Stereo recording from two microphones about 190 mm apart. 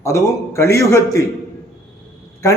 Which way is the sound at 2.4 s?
15° left (ahead or behind).